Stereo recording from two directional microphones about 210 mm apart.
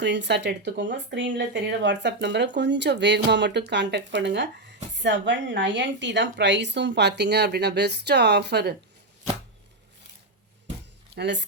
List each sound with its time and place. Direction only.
0.0 s a woman's voice: 55° right (ahead or behind)
11.1 s speech: 55° right (ahead or behind)